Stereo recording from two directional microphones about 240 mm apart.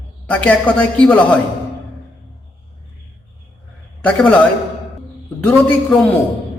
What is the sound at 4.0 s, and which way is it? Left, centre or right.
Speech, centre.